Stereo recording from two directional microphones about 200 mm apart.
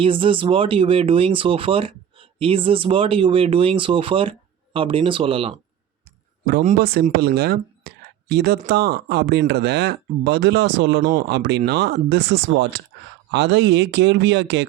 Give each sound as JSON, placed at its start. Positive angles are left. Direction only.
{"t": 0.0, "sound": "speech", "side_deg": -25}
{"t": 6.7, "sound": "speech", "side_deg": -50}